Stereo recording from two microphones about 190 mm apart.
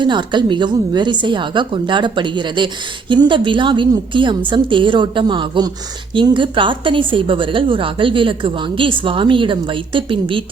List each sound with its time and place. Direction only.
0.0 s a woman's voice: 25° right (ahead or behind)